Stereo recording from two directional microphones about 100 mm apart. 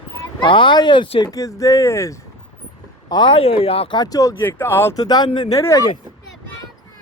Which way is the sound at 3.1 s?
55° left (ahead or behind).